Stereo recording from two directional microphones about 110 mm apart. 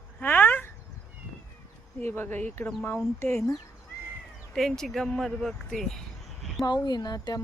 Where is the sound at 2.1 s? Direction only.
15° left (ahead or behind).